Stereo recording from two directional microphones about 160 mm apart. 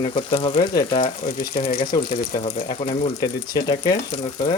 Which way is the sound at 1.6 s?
65° left (ahead or behind).